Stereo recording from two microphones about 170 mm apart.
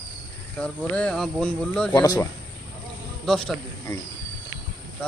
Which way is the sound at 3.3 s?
5° left (ahead or behind).